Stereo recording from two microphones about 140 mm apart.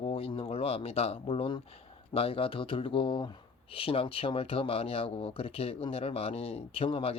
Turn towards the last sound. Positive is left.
turn(degrees=40)  # may be behind; listen again after turning